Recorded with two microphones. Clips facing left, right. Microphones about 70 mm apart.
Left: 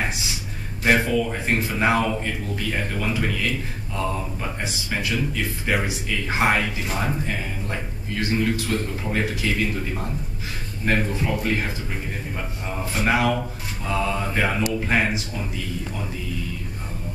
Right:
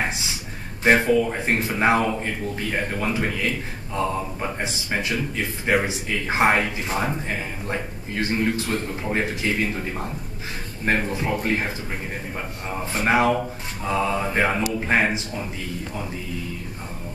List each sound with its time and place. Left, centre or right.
0.8 s speech: centre
8.2 s speech: right
10.9 s speech: centre
13.0 s speech: right